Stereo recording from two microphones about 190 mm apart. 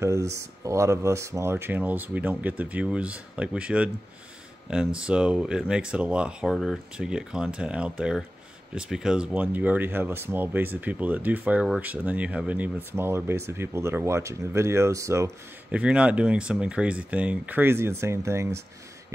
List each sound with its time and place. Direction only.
0.0 s speech: 15° right (ahead or behind)